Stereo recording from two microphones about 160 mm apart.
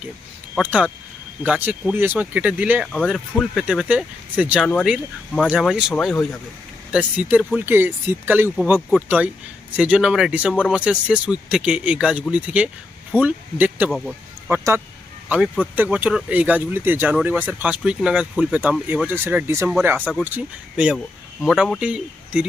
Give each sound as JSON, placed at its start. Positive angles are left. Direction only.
{"t": 0.6, "sound": "speech", "side_deg": -10}
{"t": 2.9, "sound": "speech", "side_deg": 5}
{"t": 4.8, "sound": "speech", "side_deg": 5}
{"t": 14.5, "sound": "speech", "side_deg": -15}